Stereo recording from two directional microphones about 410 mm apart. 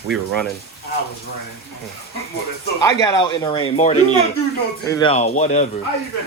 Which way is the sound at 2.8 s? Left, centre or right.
Centre.